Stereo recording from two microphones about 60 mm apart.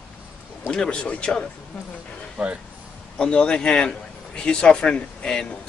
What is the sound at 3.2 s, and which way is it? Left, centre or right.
A man's voice, centre.